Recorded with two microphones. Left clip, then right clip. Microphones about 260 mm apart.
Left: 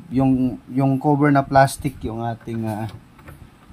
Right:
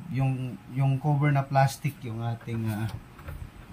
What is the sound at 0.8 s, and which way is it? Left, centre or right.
Speech, left.